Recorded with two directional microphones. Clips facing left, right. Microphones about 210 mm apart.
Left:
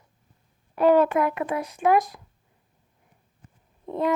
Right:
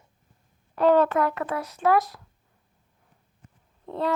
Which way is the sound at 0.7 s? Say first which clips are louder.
Left 1 dB; 10° left (ahead or behind).